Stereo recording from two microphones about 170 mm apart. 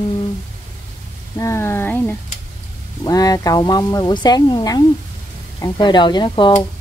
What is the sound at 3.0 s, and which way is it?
Speech, 20° left (ahead or behind).